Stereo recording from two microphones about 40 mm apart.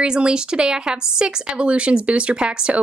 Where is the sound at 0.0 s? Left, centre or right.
Right.